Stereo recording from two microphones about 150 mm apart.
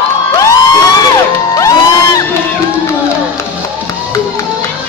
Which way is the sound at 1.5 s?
25° left (ahead or behind).